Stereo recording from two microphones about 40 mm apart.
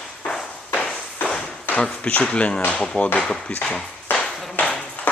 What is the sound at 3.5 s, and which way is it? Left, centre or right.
Speech, left.